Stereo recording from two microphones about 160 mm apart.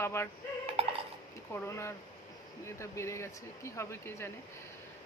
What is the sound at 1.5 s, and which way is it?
Speech, 15° left (ahead or behind).